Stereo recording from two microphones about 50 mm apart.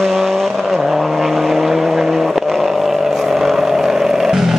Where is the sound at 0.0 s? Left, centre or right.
Centre.